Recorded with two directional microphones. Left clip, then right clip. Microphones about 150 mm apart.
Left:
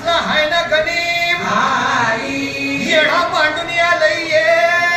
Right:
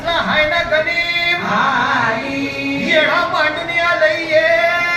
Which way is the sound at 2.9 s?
40° left (ahead or behind).